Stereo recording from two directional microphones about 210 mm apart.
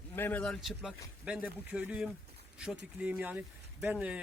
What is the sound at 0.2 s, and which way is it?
A man's voice, 10° left (ahead or behind).